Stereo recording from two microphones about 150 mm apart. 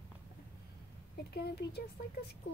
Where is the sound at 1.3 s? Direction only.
90° left.